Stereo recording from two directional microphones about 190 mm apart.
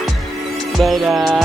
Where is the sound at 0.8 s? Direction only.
Centre (ahead or behind).